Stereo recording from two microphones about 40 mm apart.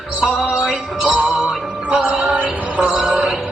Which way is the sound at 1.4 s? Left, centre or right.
Right.